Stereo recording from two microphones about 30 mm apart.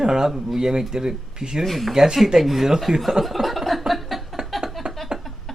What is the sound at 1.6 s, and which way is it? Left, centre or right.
Speech, centre.